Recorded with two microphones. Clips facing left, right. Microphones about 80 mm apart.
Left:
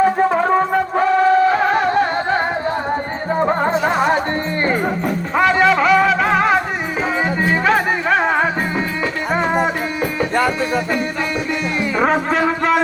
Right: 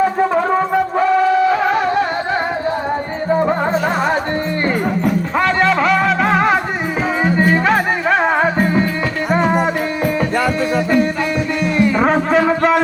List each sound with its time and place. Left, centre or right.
0.9 s music: left
3.6 s music: left
5.4 s music: centre
11.9 s music: centre